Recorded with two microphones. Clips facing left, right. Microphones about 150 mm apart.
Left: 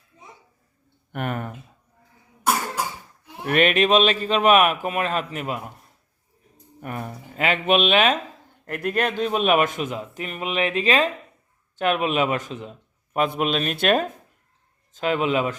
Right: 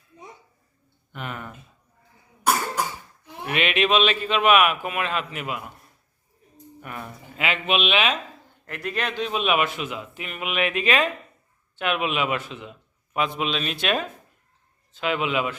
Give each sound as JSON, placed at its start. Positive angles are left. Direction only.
{"t": 1.1, "sound": "a man's voice", "side_deg": 50}
{"t": 3.4, "sound": "a man's voice", "side_deg": 45}
{"t": 6.8, "sound": "a man's voice", "side_deg": 40}